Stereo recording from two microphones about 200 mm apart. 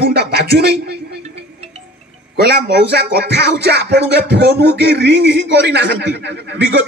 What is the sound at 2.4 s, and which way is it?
Music, 55° right (ahead or behind).